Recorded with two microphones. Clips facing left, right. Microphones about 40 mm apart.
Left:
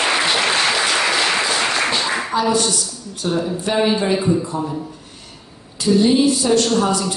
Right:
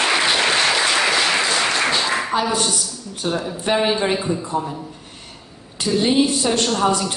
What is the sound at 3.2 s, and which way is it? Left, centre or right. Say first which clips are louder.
Speech: left 2 dB; right.